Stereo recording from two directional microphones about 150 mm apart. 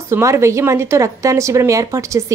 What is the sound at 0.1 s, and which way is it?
Speech, 20° right (ahead or behind).